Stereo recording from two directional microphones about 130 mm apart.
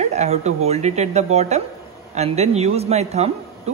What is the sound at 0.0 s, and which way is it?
Speech, 60° right (ahead or behind).